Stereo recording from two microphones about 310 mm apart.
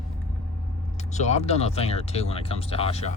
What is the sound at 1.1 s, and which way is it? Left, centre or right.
Speech, left.